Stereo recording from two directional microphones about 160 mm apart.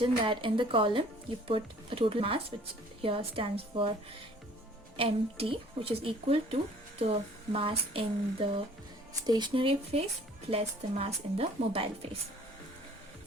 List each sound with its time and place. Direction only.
0.0 s speech: 30° right (ahead or behind)
4.9 s speech: 35° right (ahead or behind)